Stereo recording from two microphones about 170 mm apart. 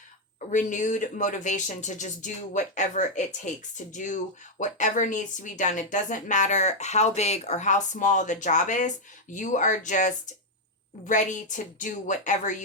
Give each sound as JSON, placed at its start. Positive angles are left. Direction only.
{"t": 0.3, "sound": "speech", "side_deg": 45}